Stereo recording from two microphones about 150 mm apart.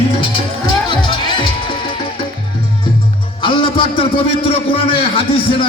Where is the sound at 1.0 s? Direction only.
30° left (ahead or behind).